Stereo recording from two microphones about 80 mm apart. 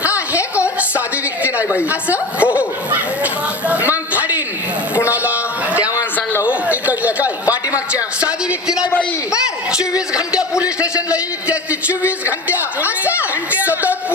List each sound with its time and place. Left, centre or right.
0.8 s music: centre
1.9 s speech: centre
3.7 s speech: centre
5.1 s a sound: centre
6.4 s speech: centre
10.3 s speech: centre